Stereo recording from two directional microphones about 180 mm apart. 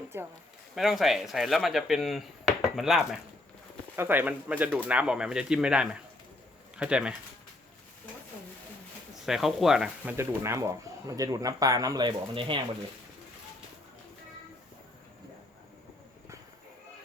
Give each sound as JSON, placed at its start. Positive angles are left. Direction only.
{"t": 0.1, "sound": "speech", "side_deg": -15}
{"t": 0.8, "sound": "speech", "side_deg": 0}
{"t": 3.9, "sound": "speech", "side_deg": -10}
{"t": 9.2, "sound": "speech", "side_deg": 0}
{"t": 10.2, "sound": "speech", "side_deg": -15}